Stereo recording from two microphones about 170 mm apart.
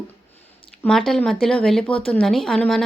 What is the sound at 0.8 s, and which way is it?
Speech, 5° left (ahead or behind).